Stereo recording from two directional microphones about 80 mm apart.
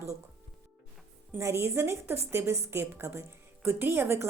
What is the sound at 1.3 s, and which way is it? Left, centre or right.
A woman's voice, right.